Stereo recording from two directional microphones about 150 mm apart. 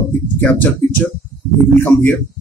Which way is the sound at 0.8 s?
55° right (ahead or behind).